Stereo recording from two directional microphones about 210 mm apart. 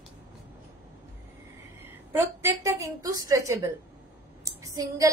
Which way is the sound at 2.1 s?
10° right (ahead or behind).